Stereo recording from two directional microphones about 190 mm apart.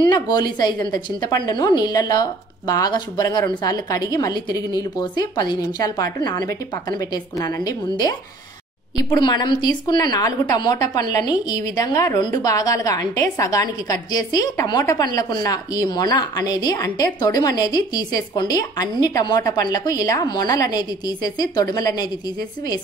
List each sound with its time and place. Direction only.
0.1 s a woman's voice: 20° left (ahead or behind)